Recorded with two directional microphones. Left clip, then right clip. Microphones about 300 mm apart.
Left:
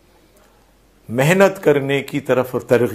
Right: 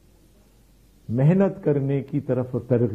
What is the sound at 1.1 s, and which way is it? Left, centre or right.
Speech, centre.